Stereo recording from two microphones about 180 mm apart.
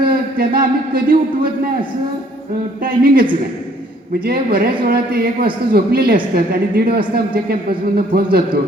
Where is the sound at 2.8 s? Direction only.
50° right (ahead or behind).